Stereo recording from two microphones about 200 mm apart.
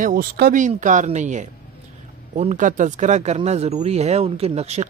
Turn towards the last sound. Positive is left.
turn(degrees=-35)  # may be behind; listen again after turning